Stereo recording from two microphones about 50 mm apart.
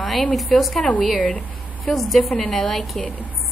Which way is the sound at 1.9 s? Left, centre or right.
Centre.